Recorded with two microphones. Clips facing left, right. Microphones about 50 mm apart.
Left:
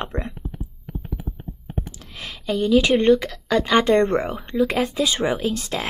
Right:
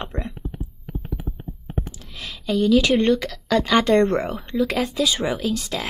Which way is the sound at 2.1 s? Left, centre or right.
Left.